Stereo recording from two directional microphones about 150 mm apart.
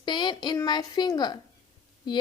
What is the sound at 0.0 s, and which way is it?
A woman's voice, 30° left (ahead or behind).